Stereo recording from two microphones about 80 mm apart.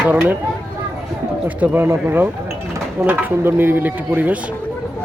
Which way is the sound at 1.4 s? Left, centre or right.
Right.